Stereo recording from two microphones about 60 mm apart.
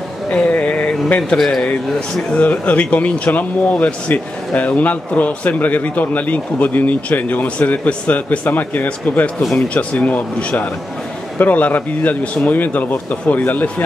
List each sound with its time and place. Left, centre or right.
0.3 s a sound: centre
1.4 s a man's voice: centre
2.3 s speech: left